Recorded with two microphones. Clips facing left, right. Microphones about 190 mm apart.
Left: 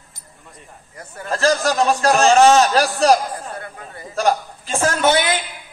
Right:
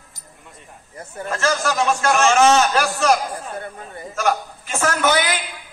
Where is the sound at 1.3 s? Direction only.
35° left (ahead or behind).